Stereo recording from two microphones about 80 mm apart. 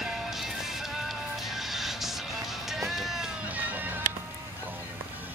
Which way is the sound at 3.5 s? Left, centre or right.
Right.